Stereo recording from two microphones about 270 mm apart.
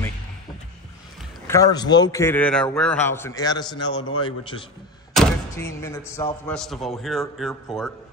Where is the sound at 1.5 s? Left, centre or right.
Centre.